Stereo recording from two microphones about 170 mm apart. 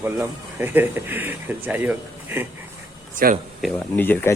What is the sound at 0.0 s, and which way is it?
Speech, 10° right (ahead or behind).